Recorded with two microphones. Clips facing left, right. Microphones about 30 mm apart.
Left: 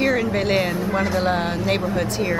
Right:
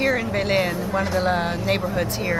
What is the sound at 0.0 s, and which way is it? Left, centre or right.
Speech, centre.